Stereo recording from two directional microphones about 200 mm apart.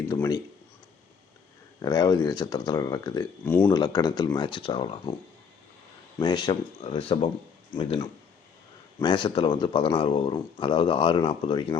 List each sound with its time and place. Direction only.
0.1 s speech: 15° left (ahead or behind)
1.8 s speech: 20° left (ahead or behind)
6.1 s speech: 20° left (ahead or behind)